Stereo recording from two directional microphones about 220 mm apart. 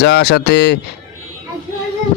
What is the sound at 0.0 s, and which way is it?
Speech, 50° left (ahead or behind).